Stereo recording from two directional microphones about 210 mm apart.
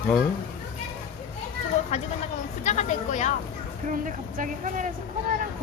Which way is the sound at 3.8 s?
40° right (ahead or behind).